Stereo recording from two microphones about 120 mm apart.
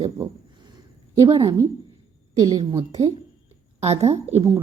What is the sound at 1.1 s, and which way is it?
Speech, 30° right (ahead or behind).